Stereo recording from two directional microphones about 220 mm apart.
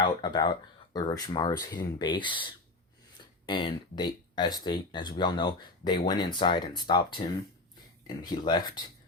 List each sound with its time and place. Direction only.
0.0 s speech: 20° left (ahead or behind)